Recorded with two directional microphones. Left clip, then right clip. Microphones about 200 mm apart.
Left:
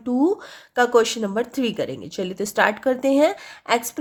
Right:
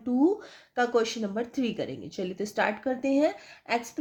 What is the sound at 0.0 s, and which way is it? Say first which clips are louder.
Speech: left 5 dB; 20° left (ahead or behind).